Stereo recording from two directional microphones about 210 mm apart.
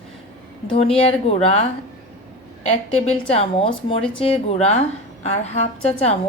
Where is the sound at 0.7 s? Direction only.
25° left (ahead or behind).